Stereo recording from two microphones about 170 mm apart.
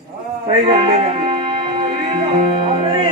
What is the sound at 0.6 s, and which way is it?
Music, 30° right (ahead or behind).